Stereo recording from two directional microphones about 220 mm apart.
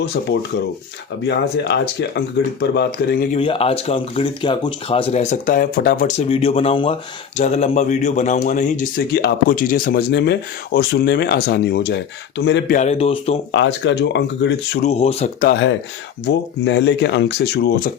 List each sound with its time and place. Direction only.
0.3 s speech: 50° left (ahead or behind)
3.3 s speech: 25° left (ahead or behind); by 6.2 s 40° left (ahead or behind)
6.2 s speech: 25° left (ahead or behind); by 12.7 s 50° left (ahead or behind)
12.7 s speech: 30° left (ahead or behind)
13.5 s speech: 55° left (ahead or behind)
14.8 s speech: 25° left (ahead or behind)
15.4 s speech: 50° left (ahead or behind)